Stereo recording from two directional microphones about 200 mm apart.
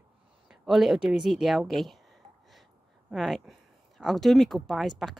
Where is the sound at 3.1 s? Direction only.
Centre (ahead or behind).